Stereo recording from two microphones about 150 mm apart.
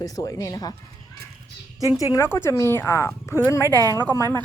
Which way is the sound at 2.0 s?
20° left (ahead or behind).